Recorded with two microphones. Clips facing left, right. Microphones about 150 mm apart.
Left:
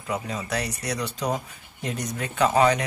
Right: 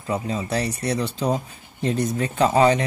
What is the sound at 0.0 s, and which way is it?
Speech, 30° right (ahead or behind).